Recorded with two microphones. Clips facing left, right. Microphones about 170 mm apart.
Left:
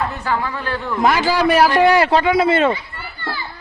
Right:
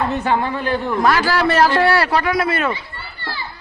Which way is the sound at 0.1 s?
20° right (ahead or behind).